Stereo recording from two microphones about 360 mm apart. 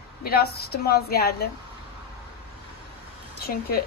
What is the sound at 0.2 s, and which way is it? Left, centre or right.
Speech, left.